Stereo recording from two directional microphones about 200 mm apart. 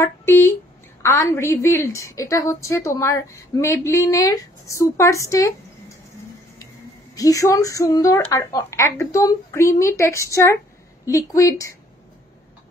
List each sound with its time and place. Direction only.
0.0 s a woman's voice: 10° left (ahead or behind)
7.2 s a woman's voice: 15° left (ahead or behind)